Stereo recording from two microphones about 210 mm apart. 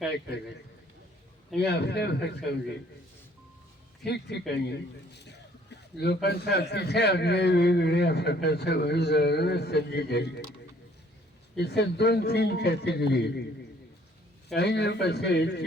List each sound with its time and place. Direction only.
1.5 s a man's voice: 50° left (ahead or behind)
4.0 s a man's voice: 50° left (ahead or behind)
11.5 s a man's voice: 50° left (ahead or behind)
14.5 s a man's voice: 50° left (ahead or behind)